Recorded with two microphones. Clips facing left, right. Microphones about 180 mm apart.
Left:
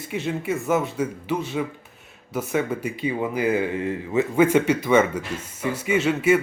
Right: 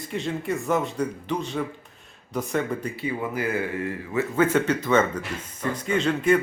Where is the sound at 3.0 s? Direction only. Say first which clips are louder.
Left 6 dB; 20° left (ahead or behind).